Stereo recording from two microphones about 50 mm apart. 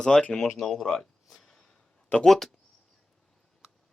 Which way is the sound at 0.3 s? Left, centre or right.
Centre.